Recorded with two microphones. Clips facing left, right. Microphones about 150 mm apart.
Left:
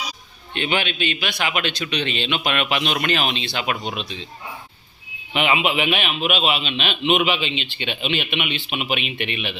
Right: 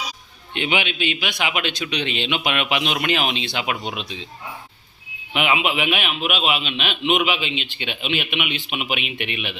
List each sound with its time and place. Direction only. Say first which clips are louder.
0.5 s a man's voice: even; 15° right (ahead or behind)
5.3 s speech: left 1 dB; 5° right (ahead or behind)